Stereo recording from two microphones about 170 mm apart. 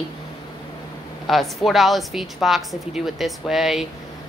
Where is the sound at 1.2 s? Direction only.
Centre (ahead or behind).